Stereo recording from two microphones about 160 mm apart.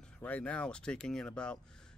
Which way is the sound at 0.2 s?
10° left (ahead or behind).